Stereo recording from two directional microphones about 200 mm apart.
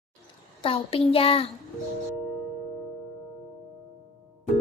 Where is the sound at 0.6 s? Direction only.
30° left (ahead or behind).